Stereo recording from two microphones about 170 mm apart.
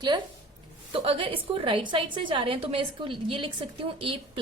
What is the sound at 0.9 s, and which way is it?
A woman's voice, 35° right (ahead or behind).